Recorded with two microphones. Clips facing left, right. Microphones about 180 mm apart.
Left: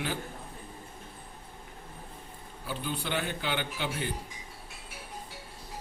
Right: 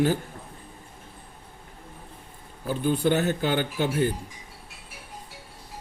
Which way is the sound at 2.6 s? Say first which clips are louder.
Right 11 dB; 45° right (ahead or behind).